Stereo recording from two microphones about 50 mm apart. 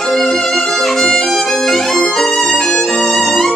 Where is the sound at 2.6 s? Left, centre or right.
Centre.